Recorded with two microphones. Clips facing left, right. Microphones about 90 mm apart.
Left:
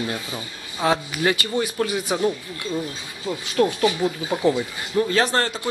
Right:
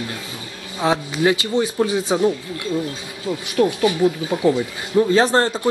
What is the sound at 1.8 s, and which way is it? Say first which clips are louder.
Speech: right 5 dB; 25° right (ahead or behind).